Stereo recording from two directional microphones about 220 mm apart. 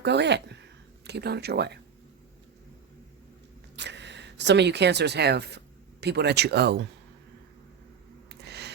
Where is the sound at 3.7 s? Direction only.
50° right (ahead or behind).